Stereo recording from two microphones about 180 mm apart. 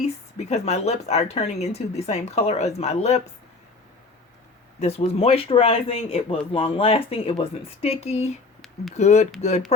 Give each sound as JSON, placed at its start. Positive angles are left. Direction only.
{"t": 0.0, "sound": "speech", "side_deg": 35}
{"t": 4.8, "sound": "speech", "side_deg": 35}